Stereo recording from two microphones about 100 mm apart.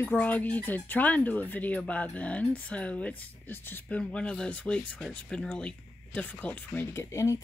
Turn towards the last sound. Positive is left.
turn(degrees=30)  # may be behind; listen again after turning